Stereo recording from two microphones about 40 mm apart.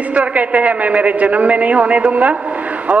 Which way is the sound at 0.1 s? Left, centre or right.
Right.